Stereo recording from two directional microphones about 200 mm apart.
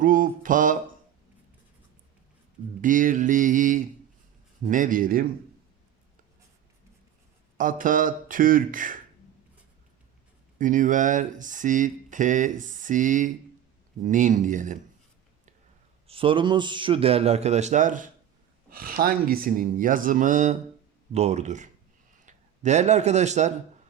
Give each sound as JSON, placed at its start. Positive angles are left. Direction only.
{"t": 0.0, "sound": "speech", "side_deg": -45}
{"t": 2.8, "sound": "speech", "side_deg": -40}
{"t": 7.6, "sound": "speech", "side_deg": -40}
{"t": 10.6, "sound": "speech", "side_deg": -40}
{"t": 16.0, "sound": "a man's voice", "side_deg": -25}